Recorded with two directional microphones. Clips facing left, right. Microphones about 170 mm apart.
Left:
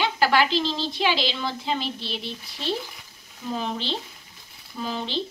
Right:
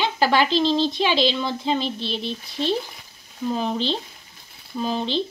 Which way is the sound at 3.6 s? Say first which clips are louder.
Right 5 dB; 20° right (ahead or behind).